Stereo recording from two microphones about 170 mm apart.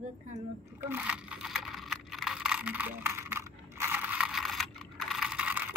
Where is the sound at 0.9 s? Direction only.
5° right (ahead or behind).